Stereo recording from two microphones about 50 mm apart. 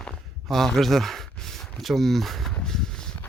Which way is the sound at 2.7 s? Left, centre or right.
Centre.